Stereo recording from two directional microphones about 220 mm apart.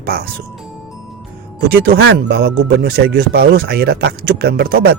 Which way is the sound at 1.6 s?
45° right (ahead or behind).